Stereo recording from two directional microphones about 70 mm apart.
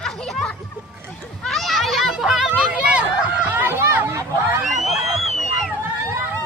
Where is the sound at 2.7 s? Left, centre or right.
Centre.